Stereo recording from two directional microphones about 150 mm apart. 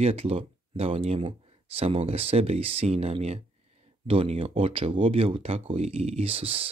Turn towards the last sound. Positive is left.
turn(degrees=-40)  # may be behind; listen again after turning